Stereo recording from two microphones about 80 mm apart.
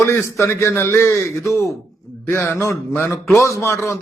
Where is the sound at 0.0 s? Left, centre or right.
Left.